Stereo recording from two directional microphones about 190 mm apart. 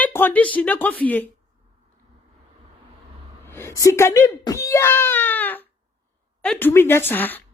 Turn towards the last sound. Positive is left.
turn(degrees=10)  # may be behind; listen again after turning